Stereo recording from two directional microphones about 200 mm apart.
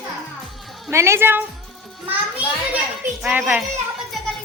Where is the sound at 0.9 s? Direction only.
15° right (ahead or behind).